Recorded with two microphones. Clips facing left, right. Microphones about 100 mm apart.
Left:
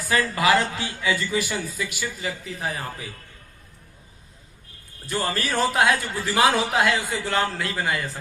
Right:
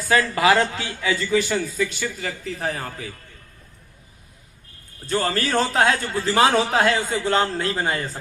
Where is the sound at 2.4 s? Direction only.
40° right (ahead or behind).